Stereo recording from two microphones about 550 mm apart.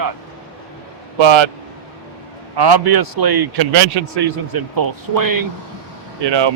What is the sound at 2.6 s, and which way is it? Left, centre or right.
Speech, right.